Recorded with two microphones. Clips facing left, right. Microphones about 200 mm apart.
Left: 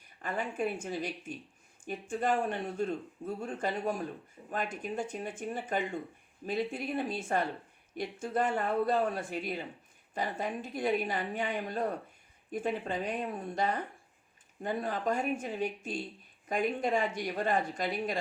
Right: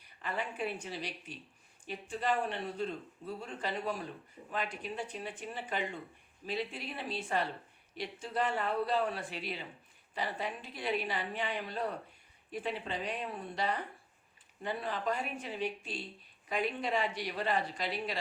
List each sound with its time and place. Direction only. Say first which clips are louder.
0.0 s speech: left 3 dB; 45° left (ahead or behind)